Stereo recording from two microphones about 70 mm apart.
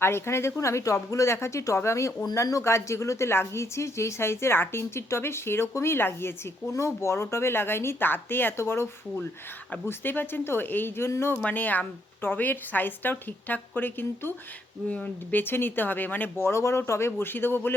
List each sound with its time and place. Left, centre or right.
0.0 s a woman's voice: left
11.4 s speech: left
14.8 s speech: left
16.5 s a woman's voice: left